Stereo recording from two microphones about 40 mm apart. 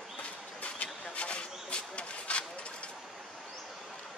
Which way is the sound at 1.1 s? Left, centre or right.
Left.